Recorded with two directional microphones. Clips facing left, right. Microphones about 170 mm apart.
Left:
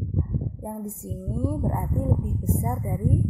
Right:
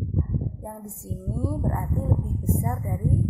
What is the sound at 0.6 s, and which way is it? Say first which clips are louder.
Speech: left 4 dB; 15° left (ahead or behind).